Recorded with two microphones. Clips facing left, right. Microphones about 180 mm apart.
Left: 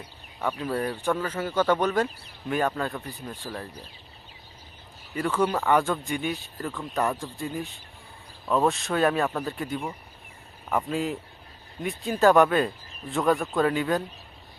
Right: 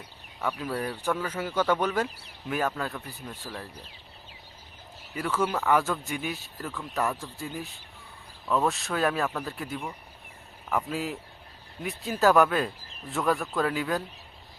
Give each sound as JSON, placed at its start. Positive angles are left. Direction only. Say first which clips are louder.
{"t": 0.4, "sound": "speech", "louder": "left 3 dB", "side_deg": -5}
{"t": 5.4, "sound": "speech", "louder": "left 2 dB", "side_deg": -5}